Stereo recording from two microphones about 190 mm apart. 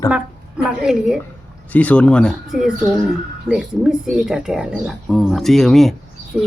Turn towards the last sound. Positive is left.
turn(degrees=-5)  # may be behind; listen again after turning